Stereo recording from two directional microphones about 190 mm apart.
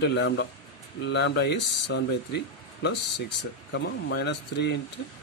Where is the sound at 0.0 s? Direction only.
65° left (ahead or behind).